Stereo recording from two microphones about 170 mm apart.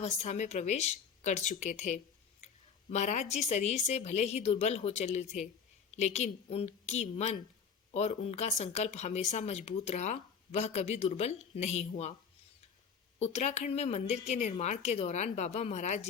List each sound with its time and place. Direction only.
0.0 s a woman's voice: 45° left (ahead or behind)
13.1 s speech: 40° left (ahead or behind)